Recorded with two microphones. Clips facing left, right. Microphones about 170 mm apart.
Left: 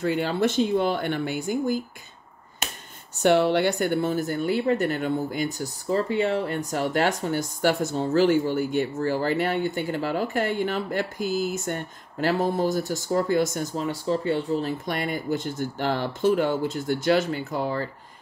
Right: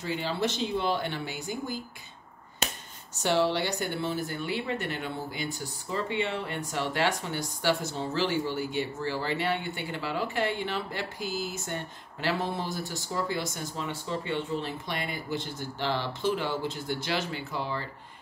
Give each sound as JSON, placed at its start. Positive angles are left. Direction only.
{"t": 0.0, "sound": "a woman's voice", "side_deg": 50}
{"t": 3.2, "sound": "a woman's voice", "side_deg": 55}